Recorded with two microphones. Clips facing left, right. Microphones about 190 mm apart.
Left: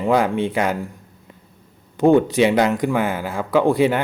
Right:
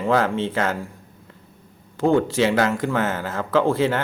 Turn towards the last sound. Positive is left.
turn(degrees=15)  # may be behind; listen again after turning